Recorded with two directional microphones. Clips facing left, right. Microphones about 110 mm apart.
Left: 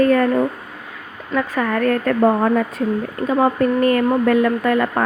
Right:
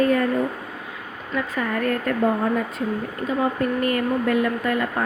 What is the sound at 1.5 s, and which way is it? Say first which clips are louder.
Speech: left 5 dB; 55° left (ahead or behind).